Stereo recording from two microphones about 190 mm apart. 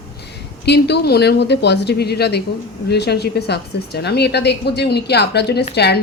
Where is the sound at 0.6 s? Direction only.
60° left (ahead or behind).